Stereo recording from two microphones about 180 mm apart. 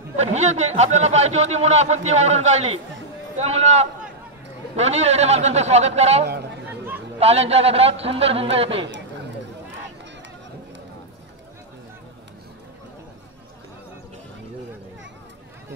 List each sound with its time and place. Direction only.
0.2 s a man's voice: 40° right (ahead or behind)